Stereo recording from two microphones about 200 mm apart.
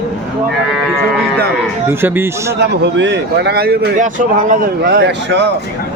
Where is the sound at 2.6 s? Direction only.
60° right (ahead or behind).